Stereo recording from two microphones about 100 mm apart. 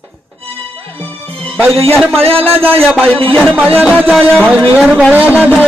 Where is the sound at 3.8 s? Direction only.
15° right (ahead or behind).